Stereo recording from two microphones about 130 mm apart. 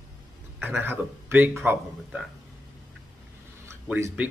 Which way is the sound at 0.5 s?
15° right (ahead or behind).